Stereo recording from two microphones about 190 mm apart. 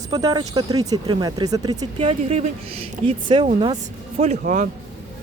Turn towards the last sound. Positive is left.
turn(degrees=-40)  # may be behind; listen again after turning